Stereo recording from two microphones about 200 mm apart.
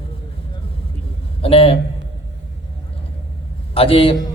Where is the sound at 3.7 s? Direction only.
30° left (ahead or behind).